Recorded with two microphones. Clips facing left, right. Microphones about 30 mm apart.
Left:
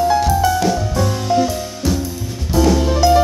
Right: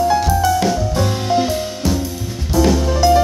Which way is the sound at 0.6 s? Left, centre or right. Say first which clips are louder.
Even; right.